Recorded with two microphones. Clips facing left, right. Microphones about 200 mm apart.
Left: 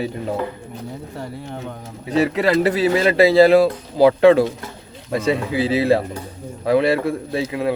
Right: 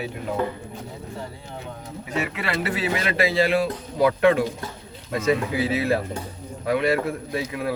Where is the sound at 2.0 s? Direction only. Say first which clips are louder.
Left 10 dB; 35° left (ahead or behind).